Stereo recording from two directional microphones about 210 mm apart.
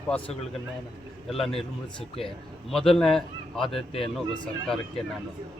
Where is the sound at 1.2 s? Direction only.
Centre (ahead or behind).